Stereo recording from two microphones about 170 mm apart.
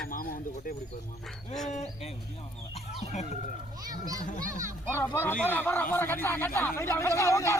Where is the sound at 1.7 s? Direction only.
40° left (ahead or behind).